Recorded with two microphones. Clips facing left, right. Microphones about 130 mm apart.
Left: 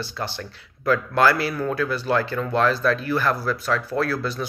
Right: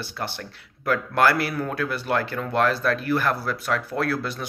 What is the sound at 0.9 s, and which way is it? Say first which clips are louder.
Speech: left 2 dB; 60° right (ahead or behind).